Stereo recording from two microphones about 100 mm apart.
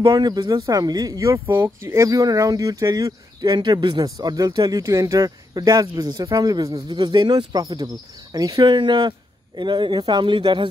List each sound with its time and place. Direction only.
0.0 s speech: 40° right (ahead or behind)